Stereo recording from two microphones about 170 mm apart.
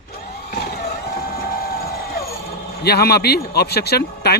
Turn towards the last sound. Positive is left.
turn(degrees=70)  # may be behind; listen again after turning